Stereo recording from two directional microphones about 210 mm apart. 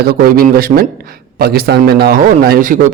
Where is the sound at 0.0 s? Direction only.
45° right (ahead or behind).